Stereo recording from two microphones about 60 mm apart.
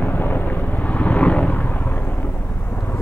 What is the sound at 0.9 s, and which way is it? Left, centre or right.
Vehicle, left.